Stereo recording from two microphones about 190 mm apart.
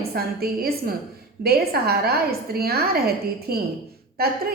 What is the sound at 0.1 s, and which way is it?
A woman's voice, 55° right (ahead or behind).